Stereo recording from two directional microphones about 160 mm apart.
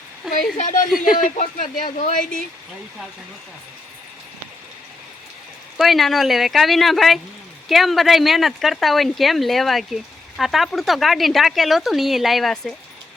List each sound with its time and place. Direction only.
0.5 s speech: 50° left (ahead or behind)
0.9 s speech: 5° right (ahead or behind)
1.4 s speech: 55° left (ahead or behind)
5.7 s speech: centre (ahead or behind)